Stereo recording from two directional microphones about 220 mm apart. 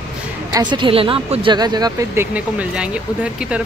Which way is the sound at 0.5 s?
20° right (ahead or behind).